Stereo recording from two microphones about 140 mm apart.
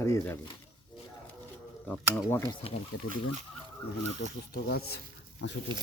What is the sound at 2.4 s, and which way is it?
Speech, 45° left (ahead or behind).